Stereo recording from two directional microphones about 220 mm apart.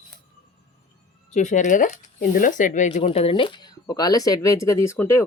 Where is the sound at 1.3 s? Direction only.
35° left (ahead or behind).